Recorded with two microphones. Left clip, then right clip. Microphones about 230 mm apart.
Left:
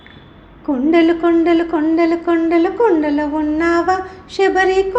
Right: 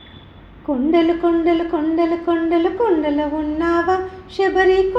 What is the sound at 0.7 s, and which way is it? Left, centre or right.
Speech, left.